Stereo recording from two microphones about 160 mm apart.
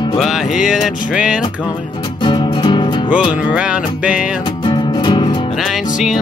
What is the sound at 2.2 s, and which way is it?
Music, 30° left (ahead or behind).